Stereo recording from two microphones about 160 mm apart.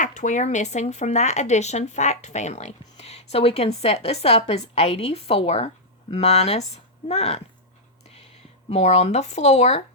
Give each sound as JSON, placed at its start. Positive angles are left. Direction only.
{"t": 0.0, "sound": "speech", "side_deg": 50}
{"t": 8.7, "sound": "speech", "side_deg": 40}